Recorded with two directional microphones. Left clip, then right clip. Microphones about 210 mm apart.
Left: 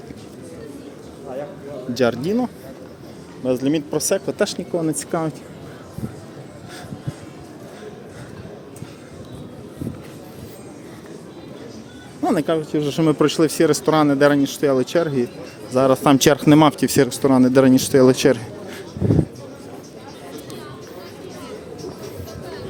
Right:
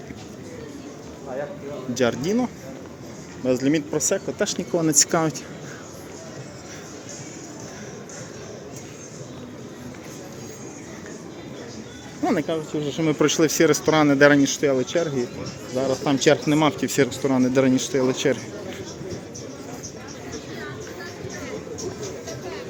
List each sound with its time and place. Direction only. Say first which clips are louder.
1.9 s speech: left 3 dB; 15° left (ahead or behind)
4.7 s speech: right 2 dB; 5° left (ahead or behind)
12.2 s a sound: left 3 dB; 20° left (ahead or behind)
12.5 s a man's voice: left 5 dB; 40° left (ahead or behind)
13.0 s a man's voice: left 2 dB; 20° left (ahead or behind); by 16.6 s 40° left (ahead or behind)
16.6 s a man's voice: left 5 dB; 30° left (ahead or behind)